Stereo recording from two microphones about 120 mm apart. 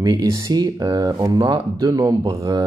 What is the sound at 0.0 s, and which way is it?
Speech, 35° right (ahead or behind).